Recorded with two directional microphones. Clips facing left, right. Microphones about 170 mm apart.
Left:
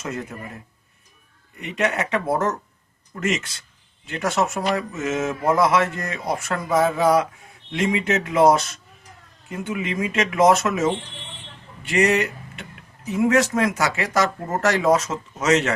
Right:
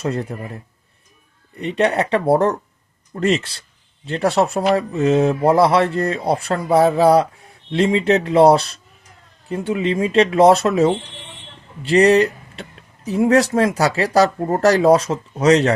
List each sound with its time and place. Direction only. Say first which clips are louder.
0.0 s speech: right 7 dB; 35° right (ahead or behind)
1.5 s speech: right 6 dB; 35° right (ahead or behind)